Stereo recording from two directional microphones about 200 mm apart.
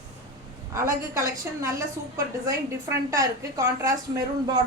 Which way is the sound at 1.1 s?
15° right (ahead or behind).